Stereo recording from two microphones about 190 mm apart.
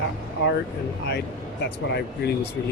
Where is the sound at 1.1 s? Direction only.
60° left (ahead or behind).